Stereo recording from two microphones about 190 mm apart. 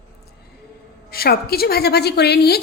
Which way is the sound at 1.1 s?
55° left (ahead or behind).